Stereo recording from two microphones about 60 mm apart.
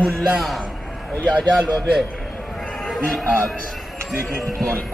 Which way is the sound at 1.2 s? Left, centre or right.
Centre.